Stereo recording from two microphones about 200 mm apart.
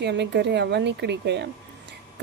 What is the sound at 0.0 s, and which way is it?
A woman's voice, 60° right (ahead or behind).